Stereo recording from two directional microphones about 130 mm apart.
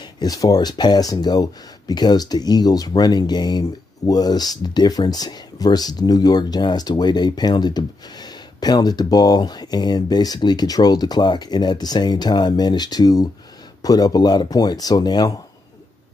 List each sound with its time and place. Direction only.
0.0 s speech: 30° left (ahead or behind)